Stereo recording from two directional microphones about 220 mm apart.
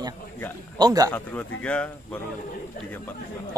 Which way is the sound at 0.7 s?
15° right (ahead or behind).